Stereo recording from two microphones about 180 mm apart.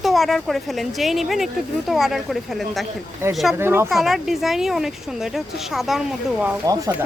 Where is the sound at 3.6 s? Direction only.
15° right (ahead or behind).